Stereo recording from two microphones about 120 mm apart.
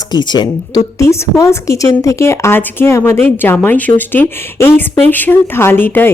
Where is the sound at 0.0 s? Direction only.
35° left (ahead or behind).